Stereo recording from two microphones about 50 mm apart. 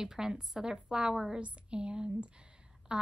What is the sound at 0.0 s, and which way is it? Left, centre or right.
A woman's voice, centre.